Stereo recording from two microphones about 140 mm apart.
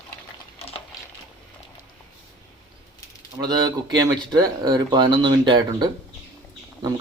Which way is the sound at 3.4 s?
30° right (ahead or behind).